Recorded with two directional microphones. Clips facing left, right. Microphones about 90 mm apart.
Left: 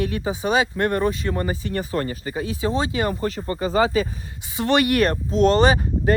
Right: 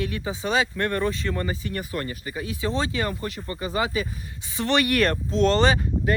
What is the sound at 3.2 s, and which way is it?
Speech, 35° left (ahead or behind).